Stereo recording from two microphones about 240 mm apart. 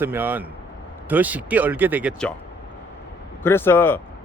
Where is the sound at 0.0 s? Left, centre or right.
Centre.